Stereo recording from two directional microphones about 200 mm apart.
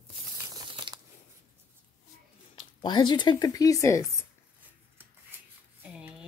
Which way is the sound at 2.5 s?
20° left (ahead or behind).